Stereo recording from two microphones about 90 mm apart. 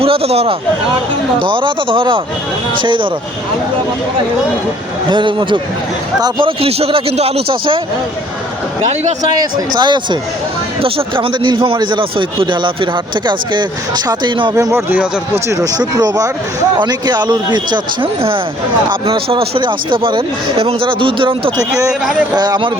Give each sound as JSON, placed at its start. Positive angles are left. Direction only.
{"t": 0.0, "sound": "a man's voice", "side_deg": -90}
{"t": 1.4, "sound": "speech", "side_deg": -70}
{"t": 2.8, "sound": "a man's voice", "side_deg": -65}
{"t": 5.0, "sound": "a man's voice", "side_deg": -60}
{"t": 6.4, "sound": "a man's voice", "side_deg": -90}
{"t": 9.3, "sound": "a man's voice", "side_deg": -50}
{"t": 10.8, "sound": "a man's voice", "side_deg": -90}
{"t": 14.5, "sound": "speech", "side_deg": -30}
{"t": 15.4, "sound": "speech", "side_deg": -40}
{"t": 16.7, "sound": "a man's voice", "side_deg": -55}
{"t": 18.9, "sound": "speech", "side_deg": -80}
{"t": 22.4, "sound": "speech", "side_deg": -50}